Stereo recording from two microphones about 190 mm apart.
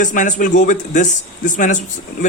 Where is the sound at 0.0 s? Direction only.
40° left (ahead or behind).